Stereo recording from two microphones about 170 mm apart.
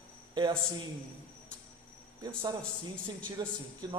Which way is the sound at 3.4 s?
25° right (ahead or behind).